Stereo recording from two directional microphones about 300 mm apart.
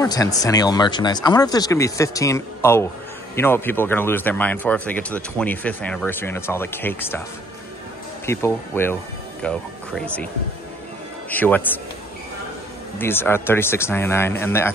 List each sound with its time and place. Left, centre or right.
0.0 s speech: centre
8.3 s speech: centre
11.2 s speech: centre
13.0 s speech: centre